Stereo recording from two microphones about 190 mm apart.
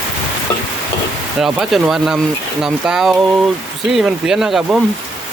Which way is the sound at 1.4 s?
Centre (ahead or behind).